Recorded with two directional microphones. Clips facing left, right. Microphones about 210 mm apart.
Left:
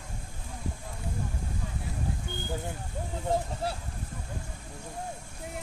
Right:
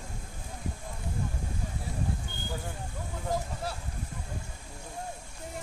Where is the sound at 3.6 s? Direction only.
30° left (ahead or behind).